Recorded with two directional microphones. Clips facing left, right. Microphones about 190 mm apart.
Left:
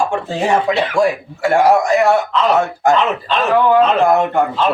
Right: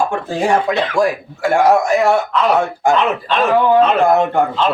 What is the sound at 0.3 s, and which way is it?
Speech, centre (ahead or behind).